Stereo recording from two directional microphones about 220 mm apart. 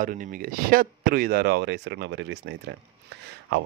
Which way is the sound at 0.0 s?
40° right (ahead or behind).